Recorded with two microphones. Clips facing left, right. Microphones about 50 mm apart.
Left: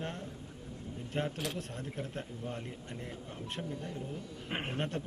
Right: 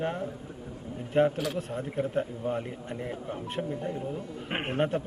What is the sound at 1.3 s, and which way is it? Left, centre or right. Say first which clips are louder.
Speech: right 7 dB; right.